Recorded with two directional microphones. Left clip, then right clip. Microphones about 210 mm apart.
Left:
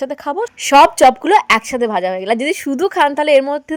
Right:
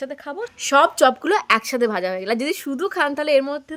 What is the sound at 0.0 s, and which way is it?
Speech, 25° left (ahead or behind).